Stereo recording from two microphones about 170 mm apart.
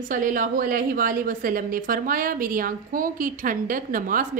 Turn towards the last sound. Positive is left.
turn(degrees=-50)  # may be behind; listen again after turning